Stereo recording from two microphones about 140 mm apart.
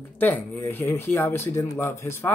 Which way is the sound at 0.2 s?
15° left (ahead or behind).